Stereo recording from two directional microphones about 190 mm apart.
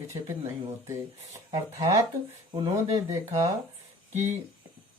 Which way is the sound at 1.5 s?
20° right (ahead or behind).